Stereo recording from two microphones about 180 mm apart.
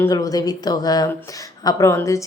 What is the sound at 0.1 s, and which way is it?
Speech, 20° left (ahead or behind).